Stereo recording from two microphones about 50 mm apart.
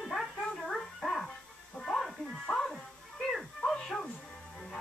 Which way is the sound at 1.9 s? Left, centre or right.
Centre.